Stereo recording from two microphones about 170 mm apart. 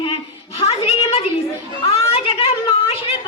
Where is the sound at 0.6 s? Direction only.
35° left (ahead or behind).